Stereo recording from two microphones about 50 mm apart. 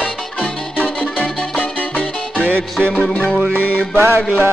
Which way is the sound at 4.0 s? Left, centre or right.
Right.